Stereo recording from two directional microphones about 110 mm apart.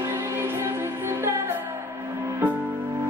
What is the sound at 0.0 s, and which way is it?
Music, 20° right (ahead or behind).